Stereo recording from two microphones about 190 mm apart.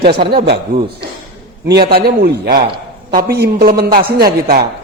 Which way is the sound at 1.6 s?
55° right (ahead or behind).